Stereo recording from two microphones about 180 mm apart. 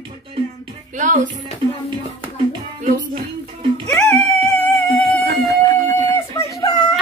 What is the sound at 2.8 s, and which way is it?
Music, 45° right (ahead or behind).